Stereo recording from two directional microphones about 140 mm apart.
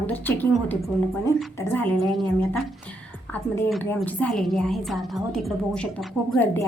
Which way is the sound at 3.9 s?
10° left (ahead or behind).